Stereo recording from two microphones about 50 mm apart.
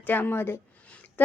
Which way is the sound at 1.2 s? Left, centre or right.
Left.